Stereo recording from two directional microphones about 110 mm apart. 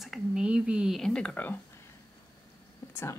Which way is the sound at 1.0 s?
5° left (ahead or behind).